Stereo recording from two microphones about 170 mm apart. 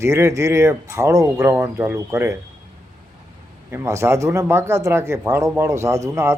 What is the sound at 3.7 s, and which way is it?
Speech, 15° right (ahead or behind).